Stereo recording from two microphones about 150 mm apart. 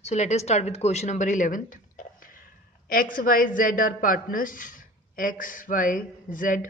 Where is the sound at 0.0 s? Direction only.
50° left (ahead or behind).